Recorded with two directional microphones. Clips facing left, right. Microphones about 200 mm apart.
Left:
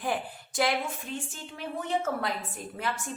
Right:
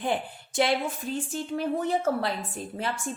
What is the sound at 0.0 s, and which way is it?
Speech, 25° right (ahead or behind).